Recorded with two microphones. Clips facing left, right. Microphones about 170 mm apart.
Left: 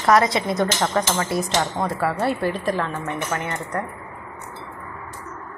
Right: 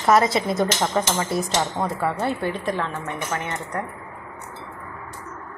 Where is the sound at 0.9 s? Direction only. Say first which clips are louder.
Left 1 dB; 20° right (ahead or behind).